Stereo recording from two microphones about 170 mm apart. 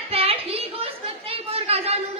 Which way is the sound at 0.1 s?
35° right (ahead or behind).